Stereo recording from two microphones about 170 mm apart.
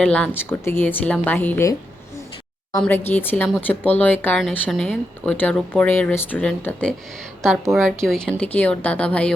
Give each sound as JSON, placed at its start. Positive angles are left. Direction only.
{"t": 0.0, "sound": "speech", "side_deg": 5}
{"t": 2.8, "sound": "speech", "side_deg": 10}